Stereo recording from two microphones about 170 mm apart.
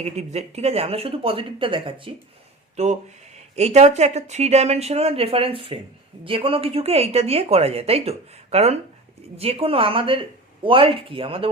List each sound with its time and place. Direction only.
0.0 s speech: 40° right (ahead or behind)